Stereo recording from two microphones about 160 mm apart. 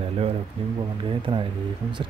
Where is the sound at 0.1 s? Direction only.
40° right (ahead or behind).